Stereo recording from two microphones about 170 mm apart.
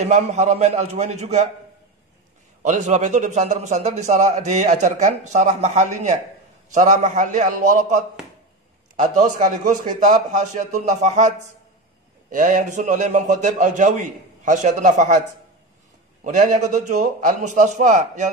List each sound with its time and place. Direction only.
0.0 s a man's voice: 40° right (ahead or behind)
2.6 s a man's voice: 45° right (ahead or behind)
16.3 s a man's voice: 50° right (ahead or behind)